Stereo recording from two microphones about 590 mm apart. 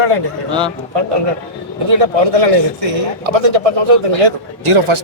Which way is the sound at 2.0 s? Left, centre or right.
Right.